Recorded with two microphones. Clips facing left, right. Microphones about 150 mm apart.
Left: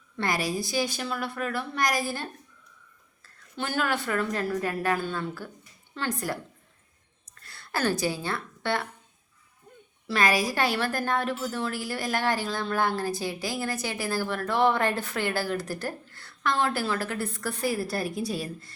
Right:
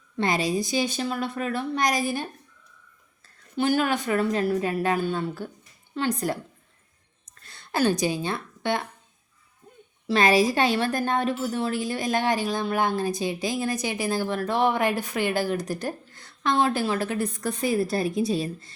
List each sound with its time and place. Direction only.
0.2 s a woman's voice: 20° right (ahead or behind)
3.6 s a woman's voice: 15° right (ahead or behind)
7.4 s speech: 20° right (ahead or behind)
10.1 s a woman's voice: 25° right (ahead or behind)